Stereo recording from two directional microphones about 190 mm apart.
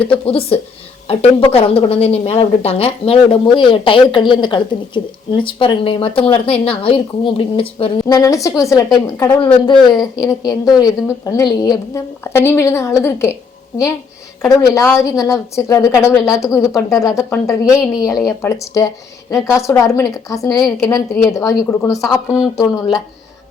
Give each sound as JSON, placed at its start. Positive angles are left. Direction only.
{"t": 0.0, "sound": "a woman's voice", "side_deg": 30}
{"t": 9.4, "sound": "a woman's voice", "side_deg": 25}
{"t": 14.4, "sound": "a woman's voice", "side_deg": 15}